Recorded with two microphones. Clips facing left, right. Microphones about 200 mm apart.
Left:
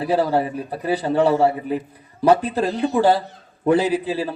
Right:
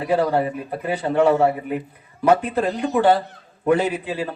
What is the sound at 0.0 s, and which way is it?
A man's voice, 35° left (ahead or behind).